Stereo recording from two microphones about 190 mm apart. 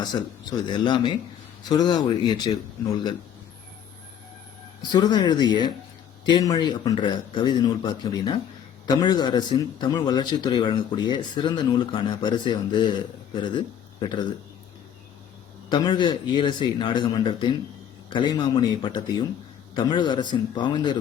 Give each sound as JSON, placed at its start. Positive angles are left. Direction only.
{"t": 0.0, "sound": "a man's voice", "side_deg": 25}
{"t": 4.8, "sound": "a man's voice", "side_deg": 25}
{"t": 15.7, "sound": "a man's voice", "side_deg": 25}